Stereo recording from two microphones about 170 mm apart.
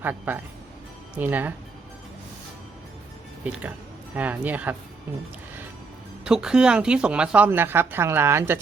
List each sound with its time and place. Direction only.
0.0 s speech: 10° right (ahead or behind)
3.4 s speech: 10° right (ahead or behind)
6.2 s speech: 5° right (ahead or behind)